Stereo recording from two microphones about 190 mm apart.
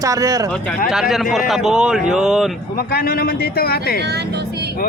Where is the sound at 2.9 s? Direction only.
50° left (ahead or behind).